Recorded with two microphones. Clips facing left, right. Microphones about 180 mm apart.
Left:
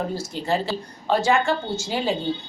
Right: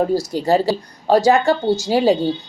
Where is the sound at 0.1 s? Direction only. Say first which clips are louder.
Right 8 dB; 40° right (ahead or behind).